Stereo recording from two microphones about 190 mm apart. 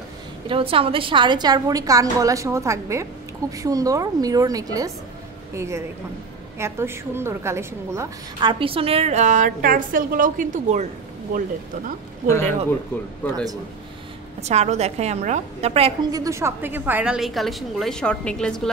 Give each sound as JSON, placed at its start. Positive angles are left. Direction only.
{"t": 0.5, "sound": "a woman's voice", "side_deg": -30}
{"t": 12.3, "sound": "speech", "side_deg": 10}
{"t": 14.4, "sound": "a woman's voice", "side_deg": -35}
{"t": 16.1, "sound": "a woman's voice", "side_deg": -15}